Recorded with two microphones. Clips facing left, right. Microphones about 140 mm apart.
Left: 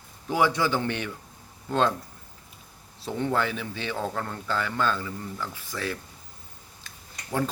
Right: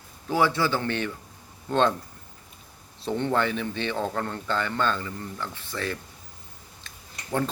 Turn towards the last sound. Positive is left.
turn(degrees=5)  # may be behind; listen again after turning